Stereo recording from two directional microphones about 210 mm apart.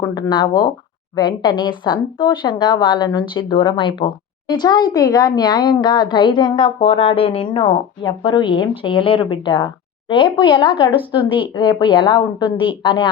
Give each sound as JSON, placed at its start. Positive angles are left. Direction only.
{"t": 0.0, "sound": "speech", "side_deg": 20}